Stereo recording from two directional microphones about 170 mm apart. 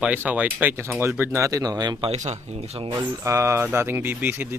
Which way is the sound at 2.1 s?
45° right (ahead or behind).